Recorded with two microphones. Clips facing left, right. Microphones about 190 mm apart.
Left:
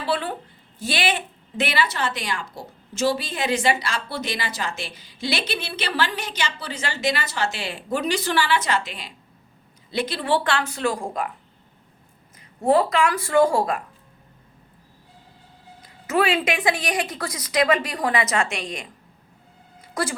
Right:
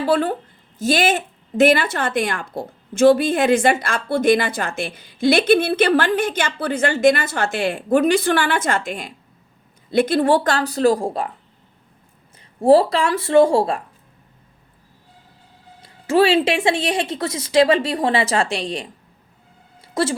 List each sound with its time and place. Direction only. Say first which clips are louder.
0.0 s a woman's voice: right 7 dB; 45° right (ahead or behind)
12.6 s speech: right 5 dB; 35° right (ahead or behind)
15.8 s speech: right 6 dB; 30° right (ahead or behind)
19.8 s a sound: right 6 dB; 25° right (ahead or behind)